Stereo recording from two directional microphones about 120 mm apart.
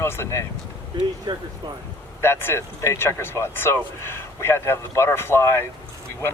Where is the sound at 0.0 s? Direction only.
20° left (ahead or behind).